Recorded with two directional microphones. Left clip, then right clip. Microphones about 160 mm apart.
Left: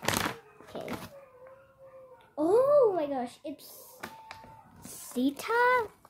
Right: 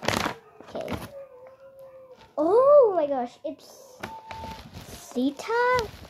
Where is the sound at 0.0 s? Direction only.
20° right (ahead or behind).